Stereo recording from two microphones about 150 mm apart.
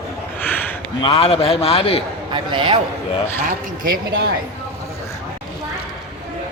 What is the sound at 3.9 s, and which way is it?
Speech, 90° right.